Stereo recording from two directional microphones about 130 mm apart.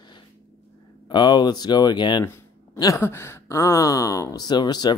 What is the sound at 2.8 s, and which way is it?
Speech, 20° left (ahead or behind).